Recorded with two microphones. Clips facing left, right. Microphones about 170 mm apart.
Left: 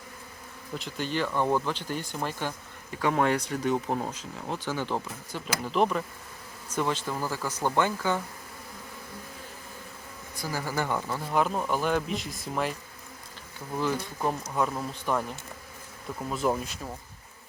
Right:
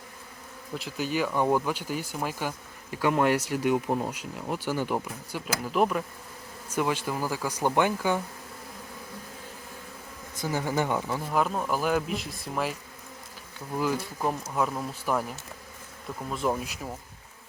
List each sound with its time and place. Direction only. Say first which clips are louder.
0.8 s speech: right 2 dB; 5° right (ahead or behind)
10.3 s speech: right 3 dB; 20° right (ahead or behind)
11.3 s speech: left 1 dB; centre (ahead or behind)
13.7 s speech: right 1 dB; 5° right (ahead or behind)